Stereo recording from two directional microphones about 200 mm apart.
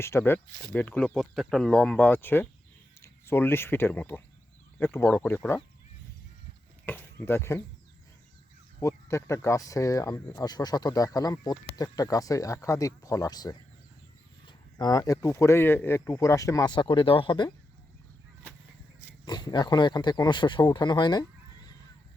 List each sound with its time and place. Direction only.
0.0 s speech: 10° left (ahead or behind)
6.8 s speech: 10° left (ahead or behind)
8.8 s speech: 15° left (ahead or behind)
19.2 s speech: 20° left (ahead or behind)